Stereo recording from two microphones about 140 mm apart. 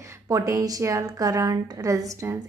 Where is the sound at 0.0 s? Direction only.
20° right (ahead or behind).